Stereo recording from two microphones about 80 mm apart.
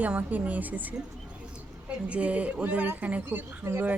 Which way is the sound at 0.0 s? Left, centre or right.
Centre.